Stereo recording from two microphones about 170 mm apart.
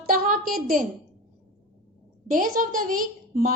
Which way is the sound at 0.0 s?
55° right (ahead or behind).